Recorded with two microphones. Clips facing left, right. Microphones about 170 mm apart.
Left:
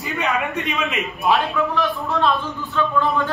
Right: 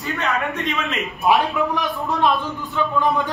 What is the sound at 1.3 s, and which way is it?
A man's voice, 15° right (ahead or behind).